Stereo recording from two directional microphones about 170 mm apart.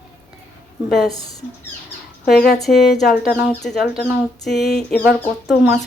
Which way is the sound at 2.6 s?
Centre (ahead or behind).